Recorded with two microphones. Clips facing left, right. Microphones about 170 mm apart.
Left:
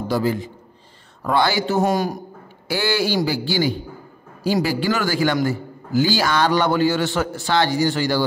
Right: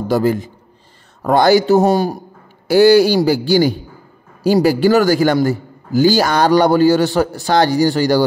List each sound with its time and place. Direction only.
0.1 s a man's voice: 50° right (ahead or behind); by 2.2 s 30° right (ahead or behind)
2.7 s a man's voice: 40° right (ahead or behind)